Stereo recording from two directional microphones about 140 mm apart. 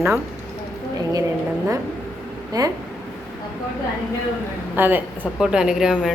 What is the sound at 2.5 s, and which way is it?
Speech, 25° right (ahead or behind).